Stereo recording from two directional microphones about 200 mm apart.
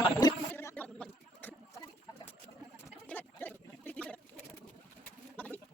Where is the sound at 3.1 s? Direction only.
10° left (ahead or behind).